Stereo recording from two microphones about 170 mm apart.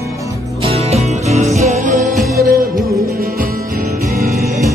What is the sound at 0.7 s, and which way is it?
Music, 40° right (ahead or behind).